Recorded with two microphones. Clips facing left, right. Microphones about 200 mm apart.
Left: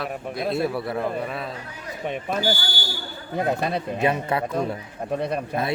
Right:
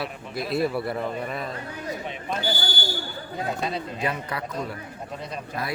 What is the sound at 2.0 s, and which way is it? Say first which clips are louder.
Speech: left 8 dB; 55° left (ahead or behind).